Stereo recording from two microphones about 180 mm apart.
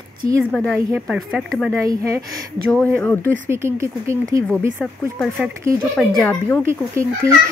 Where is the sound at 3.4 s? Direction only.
15° right (ahead or behind).